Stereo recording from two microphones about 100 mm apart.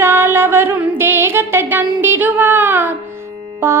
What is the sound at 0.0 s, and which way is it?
Music, 25° right (ahead or behind).